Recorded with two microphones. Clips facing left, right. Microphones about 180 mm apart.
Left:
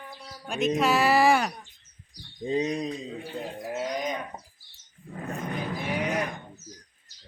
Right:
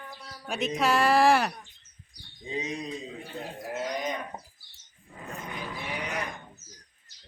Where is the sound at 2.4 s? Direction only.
40° left (ahead or behind).